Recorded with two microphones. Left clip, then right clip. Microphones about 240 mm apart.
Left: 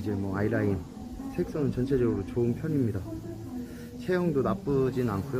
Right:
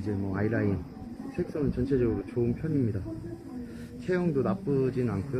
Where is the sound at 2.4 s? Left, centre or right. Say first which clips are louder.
Left 1 dB; centre.